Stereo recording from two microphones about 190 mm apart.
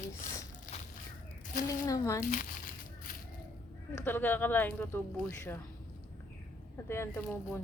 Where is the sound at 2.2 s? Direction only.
45° left (ahead or behind).